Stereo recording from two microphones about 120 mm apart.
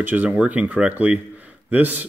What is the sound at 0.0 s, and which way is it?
A man's voice, 15° right (ahead or behind).